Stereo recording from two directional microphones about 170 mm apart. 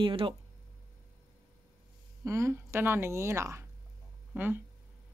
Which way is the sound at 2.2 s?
15° right (ahead or behind).